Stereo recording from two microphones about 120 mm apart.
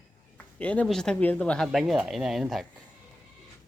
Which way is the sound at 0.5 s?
10° left (ahead or behind).